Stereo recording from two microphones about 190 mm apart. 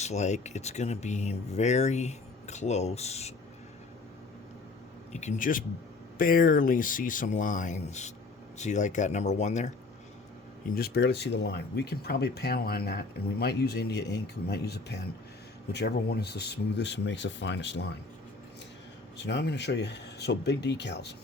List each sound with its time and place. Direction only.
0.0 s speech: 35° left (ahead or behind)
5.1 s speech: 40° left (ahead or behind)
10.8 s speech: 55° left (ahead or behind)
19.1 s speech: 65° left (ahead or behind)